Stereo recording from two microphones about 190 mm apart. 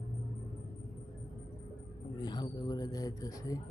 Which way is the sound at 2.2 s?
20° left (ahead or behind).